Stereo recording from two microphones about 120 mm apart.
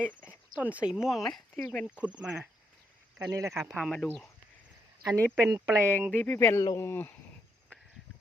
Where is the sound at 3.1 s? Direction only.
25° right (ahead or behind).